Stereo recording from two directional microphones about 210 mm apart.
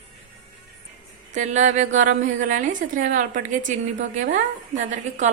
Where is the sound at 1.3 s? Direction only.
35° right (ahead or behind).